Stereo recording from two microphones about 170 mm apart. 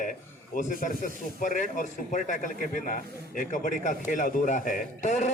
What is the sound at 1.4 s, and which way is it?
Speech, 50° left (ahead or behind).